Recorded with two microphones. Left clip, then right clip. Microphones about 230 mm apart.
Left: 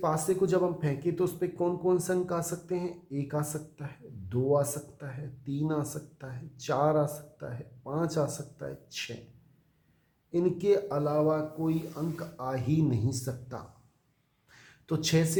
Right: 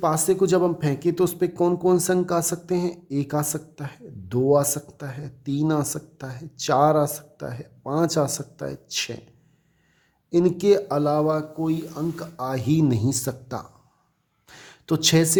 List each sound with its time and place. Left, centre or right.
0.0 s speech: right
10.3 s speech: right
14.4 s a sound: right